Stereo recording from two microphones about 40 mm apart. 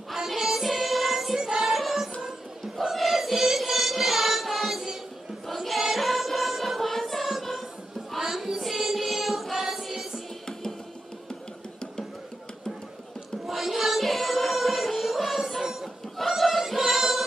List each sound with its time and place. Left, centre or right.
0.1 s music: centre
1.4 s child singing: centre
1.7 s music: centre
13.5 s music: centre
15.6 s laughter: centre
16.2 s choir: centre